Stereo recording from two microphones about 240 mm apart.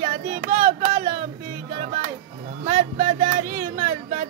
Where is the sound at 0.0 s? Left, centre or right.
Right.